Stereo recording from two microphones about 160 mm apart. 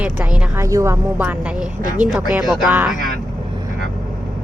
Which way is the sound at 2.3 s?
Centre (ahead or behind).